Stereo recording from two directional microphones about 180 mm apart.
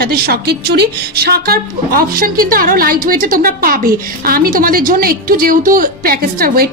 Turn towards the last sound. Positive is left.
turn(degrees=-55)  # may be behind; listen again after turning